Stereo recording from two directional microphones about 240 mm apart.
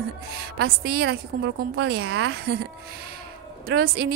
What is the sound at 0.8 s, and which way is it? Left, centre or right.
A woman's voice, right.